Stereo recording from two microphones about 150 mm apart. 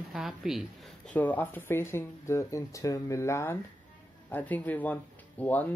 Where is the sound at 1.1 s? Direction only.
10° left (ahead or behind).